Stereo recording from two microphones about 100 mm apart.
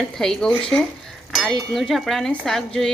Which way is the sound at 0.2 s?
5° left (ahead or behind).